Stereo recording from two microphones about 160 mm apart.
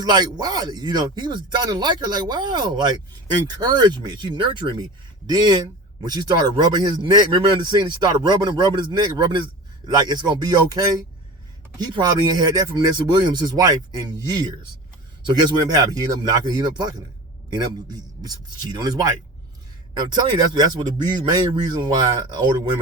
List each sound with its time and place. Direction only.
0.0 s speech: 25° right (ahead or behind)